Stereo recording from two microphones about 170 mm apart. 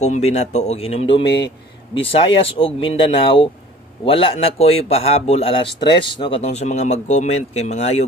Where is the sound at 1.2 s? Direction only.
90° left.